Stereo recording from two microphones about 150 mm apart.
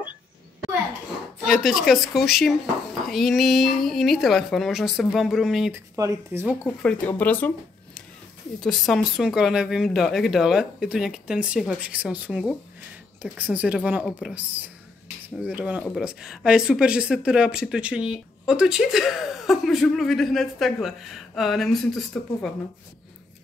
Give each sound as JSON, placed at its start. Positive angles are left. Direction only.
{"t": 1.4, "sound": "speech", "side_deg": 0}
{"t": 5.9, "sound": "a woman's voice", "side_deg": -20}
{"t": 6.8, "sound": "speech", "side_deg": 10}
{"t": 8.5, "sound": "a woman's voice", "side_deg": 0}